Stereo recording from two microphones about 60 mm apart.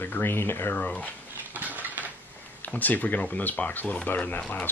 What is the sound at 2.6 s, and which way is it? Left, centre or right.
Speech, left.